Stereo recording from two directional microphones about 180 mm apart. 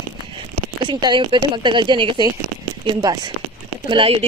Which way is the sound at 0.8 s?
25° right (ahead or behind).